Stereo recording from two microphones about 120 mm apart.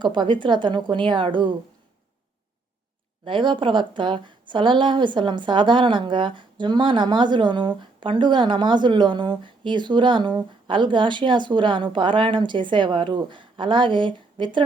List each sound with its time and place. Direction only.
0.0 s a woman's voice: 40° right (ahead or behind)
3.2 s a woman's voice: 40° right (ahead or behind)